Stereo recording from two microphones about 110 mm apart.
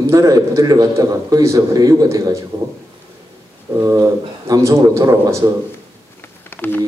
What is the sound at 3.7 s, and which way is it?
A man's voice, 30° right (ahead or behind).